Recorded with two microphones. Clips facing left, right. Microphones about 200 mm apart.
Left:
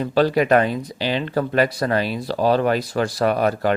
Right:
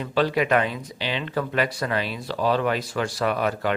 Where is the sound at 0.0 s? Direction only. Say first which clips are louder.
Left 5 dB; 40° left (ahead or behind).